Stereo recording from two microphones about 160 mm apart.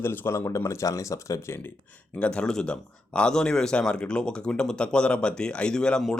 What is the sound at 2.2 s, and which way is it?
Speech, 5° left (ahead or behind).